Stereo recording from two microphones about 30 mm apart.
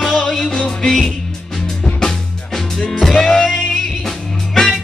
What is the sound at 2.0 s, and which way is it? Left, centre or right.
Music, centre.